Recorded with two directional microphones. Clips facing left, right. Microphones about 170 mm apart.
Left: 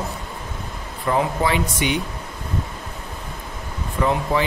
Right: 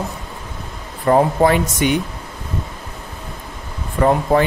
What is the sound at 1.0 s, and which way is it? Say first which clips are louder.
Speech: right 7 dB; 45° right (ahead or behind).